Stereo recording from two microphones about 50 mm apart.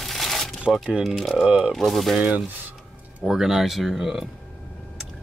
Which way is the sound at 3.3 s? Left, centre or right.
Centre.